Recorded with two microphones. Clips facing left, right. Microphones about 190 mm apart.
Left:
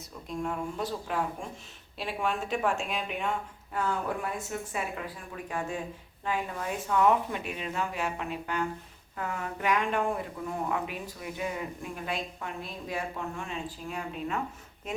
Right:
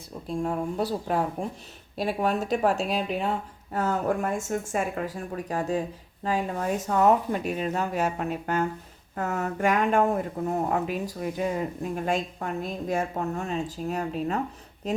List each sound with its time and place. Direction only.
0.3 s speech: 35° right (ahead or behind)